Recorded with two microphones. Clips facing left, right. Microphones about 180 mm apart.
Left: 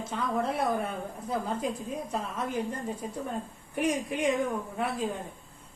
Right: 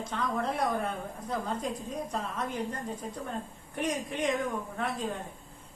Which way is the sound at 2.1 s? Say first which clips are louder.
Left 3 dB; 5° left (ahead or behind).